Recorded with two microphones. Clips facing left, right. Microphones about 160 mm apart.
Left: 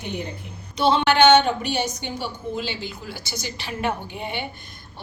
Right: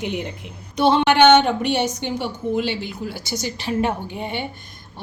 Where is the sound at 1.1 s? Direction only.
65° right (ahead or behind).